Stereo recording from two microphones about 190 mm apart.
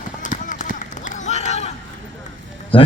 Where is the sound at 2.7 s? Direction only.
25° left (ahead or behind).